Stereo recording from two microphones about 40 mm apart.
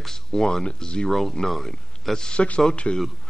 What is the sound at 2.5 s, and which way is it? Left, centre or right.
Speech, left.